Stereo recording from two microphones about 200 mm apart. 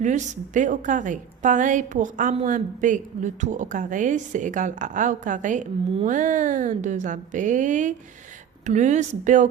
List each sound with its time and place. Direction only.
0.0 s a woman's voice: 35° right (ahead or behind)